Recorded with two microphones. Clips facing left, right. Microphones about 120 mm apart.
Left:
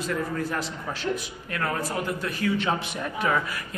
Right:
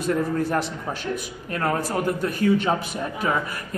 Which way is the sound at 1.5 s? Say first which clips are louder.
Right 4 dB; 35° right (ahead or behind).